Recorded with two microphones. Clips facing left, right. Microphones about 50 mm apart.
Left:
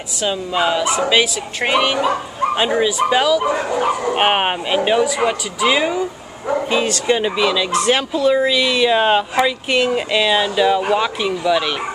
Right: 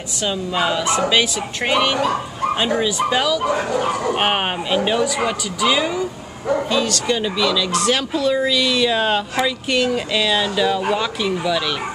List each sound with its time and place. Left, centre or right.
0.2 s speech: centre
6.7 s speech: left